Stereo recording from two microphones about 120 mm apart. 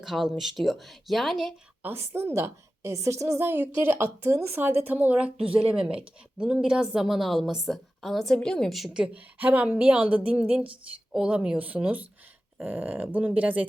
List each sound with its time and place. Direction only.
0.0 s speech: 5° right (ahead or behind)
1.8 s a woman's voice: 20° right (ahead or behind)